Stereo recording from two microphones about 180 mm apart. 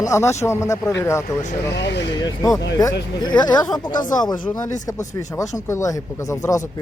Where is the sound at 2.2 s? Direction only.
20° left (ahead or behind).